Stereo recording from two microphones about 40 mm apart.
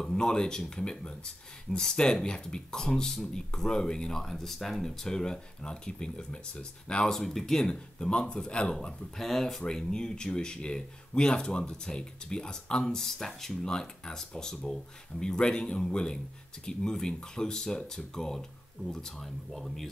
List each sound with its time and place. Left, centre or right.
0.0 s speech: centre
4.1 s speech: centre
5.1 s speech: left
7.1 s speech: centre
7.6 s speech: centre
9.1 s speech: centre